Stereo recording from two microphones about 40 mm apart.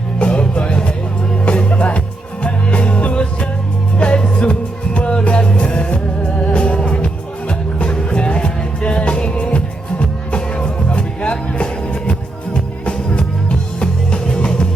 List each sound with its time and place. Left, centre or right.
0.2 s music: left